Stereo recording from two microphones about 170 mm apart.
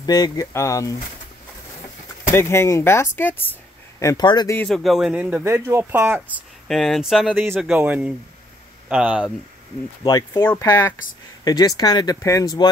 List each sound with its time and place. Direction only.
0.0 s speech: 25° left (ahead or behind)
2.3 s speech: 15° left (ahead or behind)
4.0 s speech: 20° left (ahead or behind)
4.6 s speech: centre (ahead or behind)
6.7 s speech: centre (ahead or behind)
10.0 s speech: 20° left (ahead or behind)